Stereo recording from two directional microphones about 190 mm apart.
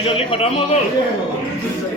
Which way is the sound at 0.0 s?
30° left (ahead or behind).